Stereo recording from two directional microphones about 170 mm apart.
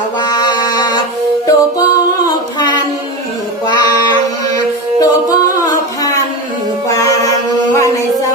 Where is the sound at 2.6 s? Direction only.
25° left (ahead or behind).